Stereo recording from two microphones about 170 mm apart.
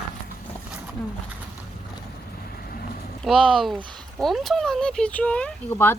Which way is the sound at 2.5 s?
60° left (ahead or behind).